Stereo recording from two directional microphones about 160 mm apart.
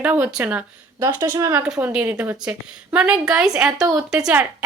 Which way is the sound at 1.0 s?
20° right (ahead or behind).